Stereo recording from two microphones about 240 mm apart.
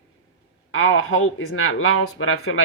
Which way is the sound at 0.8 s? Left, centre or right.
Left.